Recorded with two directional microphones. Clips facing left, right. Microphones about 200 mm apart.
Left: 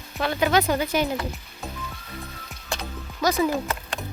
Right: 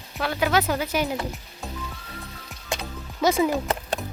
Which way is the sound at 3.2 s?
25° right (ahead or behind).